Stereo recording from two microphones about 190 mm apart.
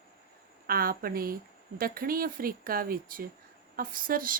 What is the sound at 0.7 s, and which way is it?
Speech, 50° right (ahead or behind).